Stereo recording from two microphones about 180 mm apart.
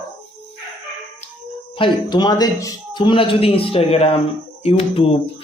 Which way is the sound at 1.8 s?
25° left (ahead or behind).